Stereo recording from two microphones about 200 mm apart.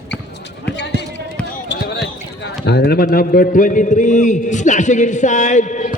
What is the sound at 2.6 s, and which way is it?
A man's voice, 55° left (ahead or behind).